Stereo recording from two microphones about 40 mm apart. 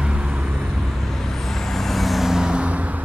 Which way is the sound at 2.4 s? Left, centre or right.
Right.